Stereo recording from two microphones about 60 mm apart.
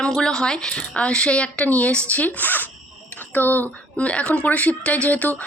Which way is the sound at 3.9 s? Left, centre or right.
Left.